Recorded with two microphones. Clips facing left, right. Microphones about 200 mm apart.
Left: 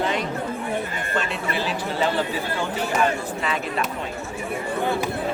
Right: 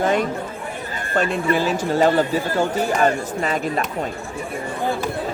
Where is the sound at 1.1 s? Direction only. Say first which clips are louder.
Right 8 dB; 45° right (ahead or behind).